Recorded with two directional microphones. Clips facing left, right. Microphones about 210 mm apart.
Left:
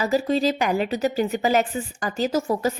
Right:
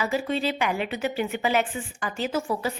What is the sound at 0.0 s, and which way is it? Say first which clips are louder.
A woman's voice: left 5 dB; 40° left (ahead or behind).